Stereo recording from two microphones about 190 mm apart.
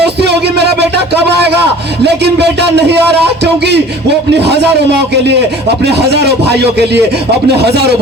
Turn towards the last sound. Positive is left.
turn(degrees=-60)  # may be behind; listen again after turning